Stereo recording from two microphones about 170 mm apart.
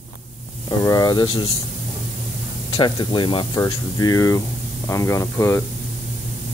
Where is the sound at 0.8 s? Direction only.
20° left (ahead or behind).